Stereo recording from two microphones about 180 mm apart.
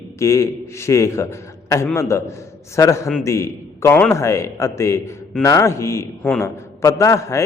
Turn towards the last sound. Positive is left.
turn(degrees=15)  # may be behind; listen again after turning